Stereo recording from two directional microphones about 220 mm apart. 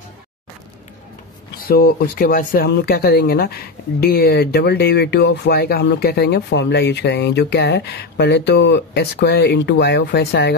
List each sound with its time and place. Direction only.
1.6 s speech: 40° left (ahead or behind)